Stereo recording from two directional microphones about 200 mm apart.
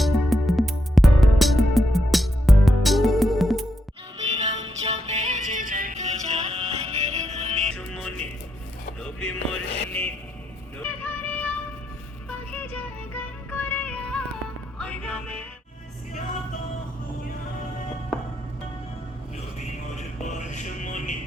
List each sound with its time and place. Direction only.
0.0 s music: centre (ahead or behind)
4.2 s music: 35° right (ahead or behind)
7.8 s music: 5° left (ahead or behind)
10.8 s music: 10° left (ahead or behind)
20.0 s music: 35° left (ahead or behind)